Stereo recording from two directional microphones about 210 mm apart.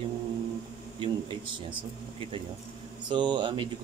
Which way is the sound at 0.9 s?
25° right (ahead or behind).